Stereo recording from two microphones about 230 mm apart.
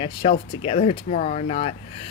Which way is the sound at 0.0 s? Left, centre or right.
Left.